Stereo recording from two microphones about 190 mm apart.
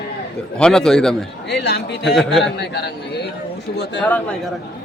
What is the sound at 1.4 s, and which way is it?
Speech, 60° left (ahead or behind).